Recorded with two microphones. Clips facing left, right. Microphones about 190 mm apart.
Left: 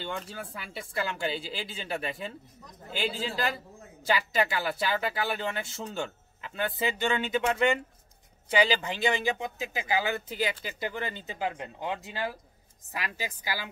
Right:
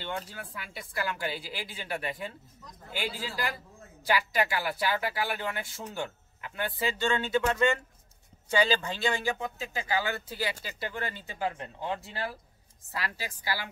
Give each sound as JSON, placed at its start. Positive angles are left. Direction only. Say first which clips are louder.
{"t": 0.7, "sound": "speech", "louder": "left 1 dB", "side_deg": 25}